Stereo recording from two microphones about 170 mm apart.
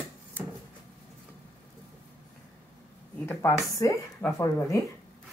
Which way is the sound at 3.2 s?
15° left (ahead or behind).